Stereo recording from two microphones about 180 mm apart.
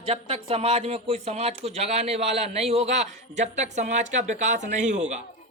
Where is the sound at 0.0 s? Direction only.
35° right (ahead or behind).